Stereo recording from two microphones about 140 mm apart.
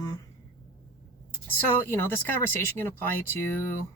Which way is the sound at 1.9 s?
15° left (ahead or behind).